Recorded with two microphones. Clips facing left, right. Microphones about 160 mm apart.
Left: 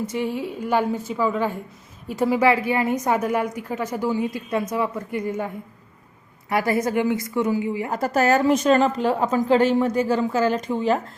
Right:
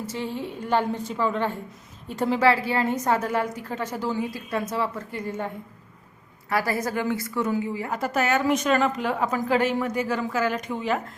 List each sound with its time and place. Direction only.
0.1 s a woman's voice: 15° left (ahead or behind)
6.5 s a woman's voice: 20° left (ahead or behind)
7.9 s a woman's voice: 40° left (ahead or behind)